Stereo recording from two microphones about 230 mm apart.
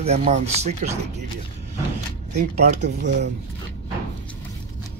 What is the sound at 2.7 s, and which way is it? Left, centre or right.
Speech, right.